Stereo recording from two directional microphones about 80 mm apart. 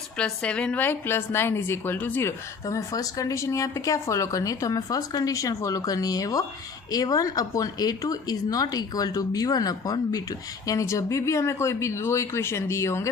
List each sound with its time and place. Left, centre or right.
0.2 s a woman's voice: centre
0.8 s a woman's voice: left
2.6 s a woman's voice: left